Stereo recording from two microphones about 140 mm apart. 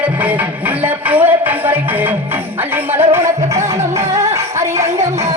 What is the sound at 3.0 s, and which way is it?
Music, 20° right (ahead or behind).